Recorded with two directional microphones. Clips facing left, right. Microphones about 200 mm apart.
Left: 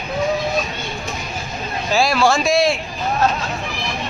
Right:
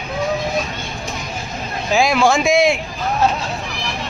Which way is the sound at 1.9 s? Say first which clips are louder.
Right 1 dB; 15° right (ahead or behind).